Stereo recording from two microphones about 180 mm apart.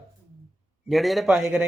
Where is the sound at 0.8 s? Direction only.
Centre (ahead or behind).